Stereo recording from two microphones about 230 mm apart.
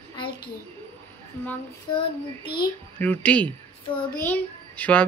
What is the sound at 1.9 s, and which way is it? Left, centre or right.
Child singing, left.